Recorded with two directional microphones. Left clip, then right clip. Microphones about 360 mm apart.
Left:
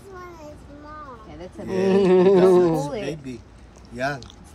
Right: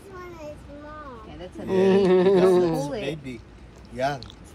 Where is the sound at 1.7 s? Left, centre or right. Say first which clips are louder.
Left 1 dB; centre.